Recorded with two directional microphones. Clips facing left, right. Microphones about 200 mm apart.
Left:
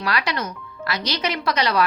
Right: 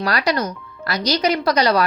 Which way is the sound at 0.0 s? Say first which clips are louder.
Right 5 dB; 40° right (ahead or behind).